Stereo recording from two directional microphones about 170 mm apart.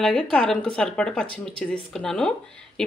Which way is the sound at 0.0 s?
5° left (ahead or behind).